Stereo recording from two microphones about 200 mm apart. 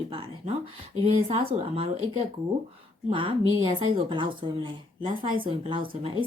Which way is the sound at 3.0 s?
25° right (ahead or behind).